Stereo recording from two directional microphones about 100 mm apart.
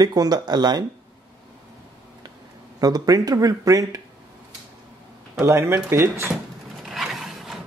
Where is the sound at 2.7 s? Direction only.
40° right (ahead or behind).